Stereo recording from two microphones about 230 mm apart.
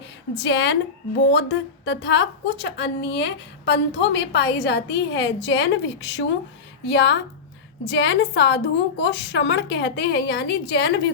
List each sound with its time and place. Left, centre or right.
0.3 s a woman's voice: left